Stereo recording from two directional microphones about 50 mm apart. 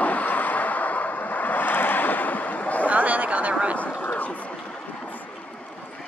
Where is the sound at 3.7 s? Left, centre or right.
Left.